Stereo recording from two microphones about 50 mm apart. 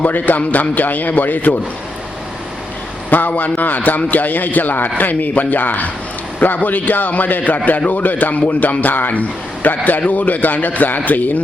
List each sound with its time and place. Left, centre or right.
0.0 s a man's voice: left
3.1 s a man's voice: left